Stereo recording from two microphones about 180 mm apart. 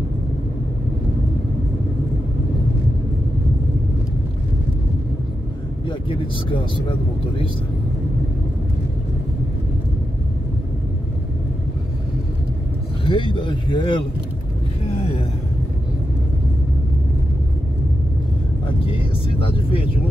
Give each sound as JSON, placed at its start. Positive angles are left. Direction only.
{"t": 5.9, "sound": "speech", "side_deg": 30}
{"t": 13.0, "sound": "speech", "side_deg": 30}
{"t": 18.9, "sound": "vehicle", "side_deg": 30}